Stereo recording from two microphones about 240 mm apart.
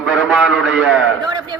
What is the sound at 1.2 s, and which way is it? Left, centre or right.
Speech, centre.